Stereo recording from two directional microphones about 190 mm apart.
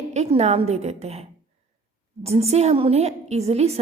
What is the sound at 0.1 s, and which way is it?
A woman's voice, 35° right (ahead or behind).